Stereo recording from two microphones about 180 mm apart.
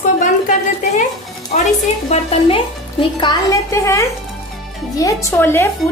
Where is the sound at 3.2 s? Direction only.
20° left (ahead or behind).